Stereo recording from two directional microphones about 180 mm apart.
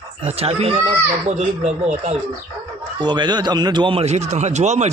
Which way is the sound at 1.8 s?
35° right (ahead or behind).